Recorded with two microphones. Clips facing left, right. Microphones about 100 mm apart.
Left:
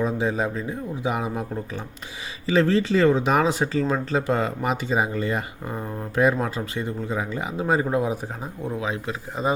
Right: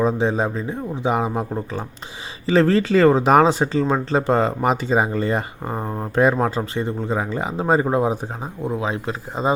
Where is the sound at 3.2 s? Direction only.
40° right (ahead or behind).